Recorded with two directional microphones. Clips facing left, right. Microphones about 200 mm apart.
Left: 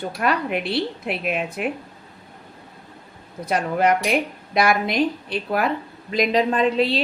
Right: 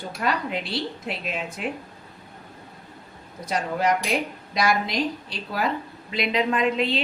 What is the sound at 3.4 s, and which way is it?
Speech, 60° left (ahead or behind).